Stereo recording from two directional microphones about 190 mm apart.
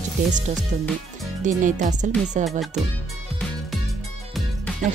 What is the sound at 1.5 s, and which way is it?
Music, 40° right (ahead or behind).